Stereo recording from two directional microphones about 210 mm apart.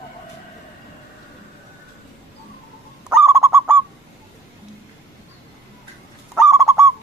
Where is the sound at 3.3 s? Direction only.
15° right (ahead or behind).